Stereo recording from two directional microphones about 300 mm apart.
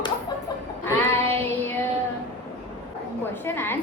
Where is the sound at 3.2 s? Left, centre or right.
Centre.